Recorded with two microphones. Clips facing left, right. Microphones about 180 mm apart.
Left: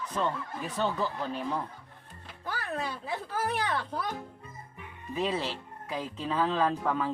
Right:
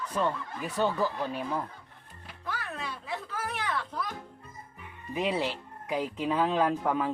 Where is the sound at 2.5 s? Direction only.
35° left (ahead or behind).